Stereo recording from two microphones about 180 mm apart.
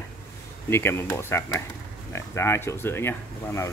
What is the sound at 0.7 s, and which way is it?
Speech, 15° left (ahead or behind).